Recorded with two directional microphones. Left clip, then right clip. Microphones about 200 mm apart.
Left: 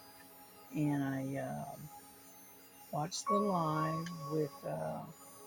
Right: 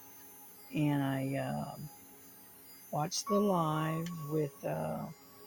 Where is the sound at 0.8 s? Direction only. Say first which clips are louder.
Right 3 dB; 50° right (ahead or behind).